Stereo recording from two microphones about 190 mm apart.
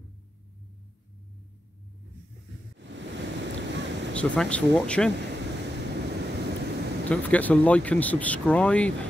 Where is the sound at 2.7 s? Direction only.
70° right (ahead or behind).